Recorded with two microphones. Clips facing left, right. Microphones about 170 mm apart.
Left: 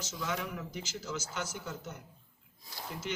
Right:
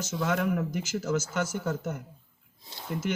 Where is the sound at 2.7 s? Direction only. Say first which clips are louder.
Even; 25° right (ahead or behind).